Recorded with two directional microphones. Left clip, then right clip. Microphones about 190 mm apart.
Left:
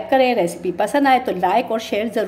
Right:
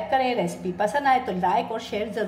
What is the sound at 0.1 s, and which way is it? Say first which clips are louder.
A woman's voice: left 8 dB; 45° left (ahead or behind).